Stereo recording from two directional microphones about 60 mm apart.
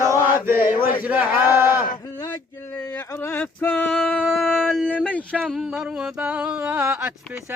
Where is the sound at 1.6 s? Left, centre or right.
Right.